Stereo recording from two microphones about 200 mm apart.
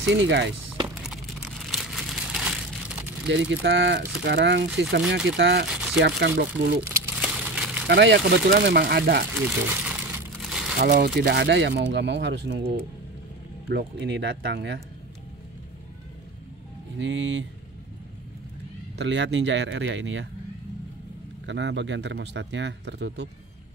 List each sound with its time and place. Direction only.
0.1 s speech: 65° right (ahead or behind)
1.0 s a sound: centre (ahead or behind)
3.3 s speech: 65° right (ahead or behind)
5.7 s crumpling: 5° right (ahead or behind)
5.9 s speech: 55° right (ahead or behind)
6.8 s crumpling: 5° right (ahead or behind)
7.9 s speech: 60° right (ahead or behind)
9.8 s crumpling: 5° right (ahead or behind)
10.8 s speech: 50° right (ahead or behind)
17.0 s speech: 65° right (ahead or behind)
18.9 s speech: 60° right (ahead or behind)
21.5 s speech: 60° right (ahead or behind)